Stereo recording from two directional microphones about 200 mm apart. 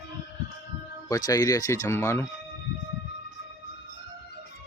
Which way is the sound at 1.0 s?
15° left (ahead or behind).